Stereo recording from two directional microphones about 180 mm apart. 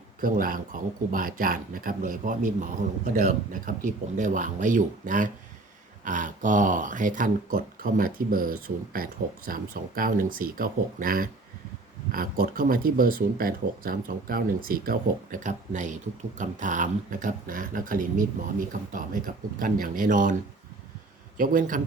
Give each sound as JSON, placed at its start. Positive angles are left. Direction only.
{"t": 0.2, "sound": "speech", "side_deg": -50}
{"t": 21.3, "sound": "speech", "side_deg": -50}